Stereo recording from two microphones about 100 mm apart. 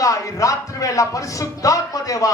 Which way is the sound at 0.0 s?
35° left (ahead or behind).